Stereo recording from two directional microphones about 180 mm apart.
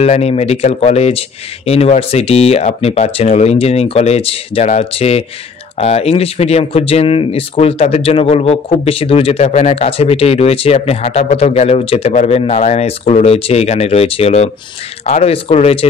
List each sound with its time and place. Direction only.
0.0 s speech: 35° left (ahead or behind)